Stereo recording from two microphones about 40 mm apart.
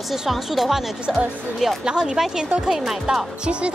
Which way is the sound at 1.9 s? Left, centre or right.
Centre.